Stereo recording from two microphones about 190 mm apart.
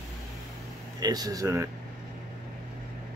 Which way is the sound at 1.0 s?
20° right (ahead or behind).